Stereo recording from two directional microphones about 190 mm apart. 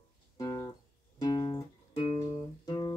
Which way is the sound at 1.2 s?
25° left (ahead or behind).